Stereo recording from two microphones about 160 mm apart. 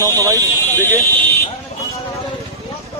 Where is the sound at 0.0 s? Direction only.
20° right (ahead or behind).